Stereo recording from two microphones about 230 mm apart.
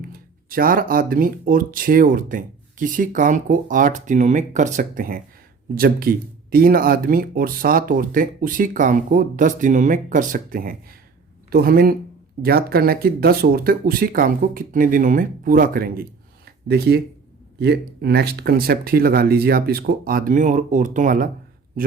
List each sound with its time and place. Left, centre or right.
0.1 s speech: right